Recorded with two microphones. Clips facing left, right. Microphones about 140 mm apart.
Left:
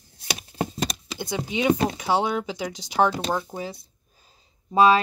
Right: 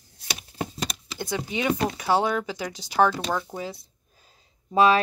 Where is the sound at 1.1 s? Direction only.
15° left (ahead or behind).